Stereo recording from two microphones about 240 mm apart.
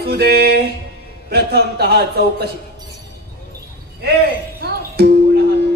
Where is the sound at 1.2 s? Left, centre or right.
Right.